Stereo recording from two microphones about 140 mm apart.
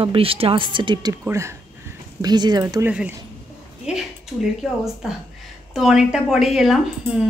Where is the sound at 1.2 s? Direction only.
20° right (ahead or behind).